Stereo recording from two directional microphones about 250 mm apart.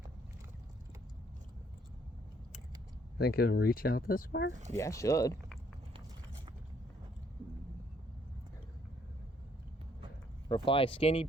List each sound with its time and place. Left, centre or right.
3.2 s speech: left
4.7 s speech: centre
10.5 s speech: left